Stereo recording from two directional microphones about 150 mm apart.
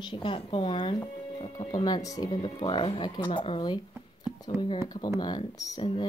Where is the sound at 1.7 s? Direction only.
25° left (ahead or behind).